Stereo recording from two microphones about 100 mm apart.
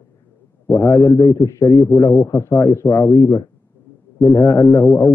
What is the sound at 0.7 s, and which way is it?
A man's voice, 35° left (ahead or behind).